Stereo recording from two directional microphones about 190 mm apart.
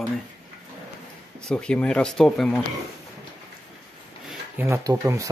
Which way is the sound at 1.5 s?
5° left (ahead or behind).